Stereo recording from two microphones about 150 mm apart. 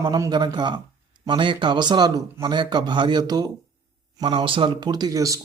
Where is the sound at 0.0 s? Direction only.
25° right (ahead or behind).